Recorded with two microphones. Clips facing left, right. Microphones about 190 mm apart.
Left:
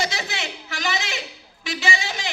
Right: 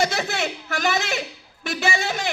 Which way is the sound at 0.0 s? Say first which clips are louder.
Right 5 dB; 50° right (ahead or behind).